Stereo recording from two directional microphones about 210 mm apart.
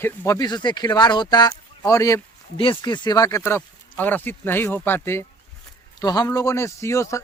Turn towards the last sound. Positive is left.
turn(degrees=15)  # may be behind; listen again after turning